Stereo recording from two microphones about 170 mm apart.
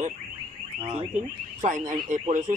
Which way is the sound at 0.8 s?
35° right (ahead or behind).